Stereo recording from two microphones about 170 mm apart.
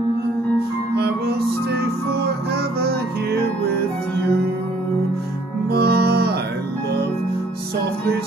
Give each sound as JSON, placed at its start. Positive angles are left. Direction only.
{"t": 0.9, "sound": "music", "side_deg": -70}
{"t": 5.7, "sound": "music", "side_deg": -70}